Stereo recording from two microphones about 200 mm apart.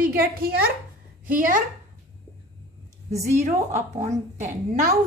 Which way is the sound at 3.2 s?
35° right (ahead or behind).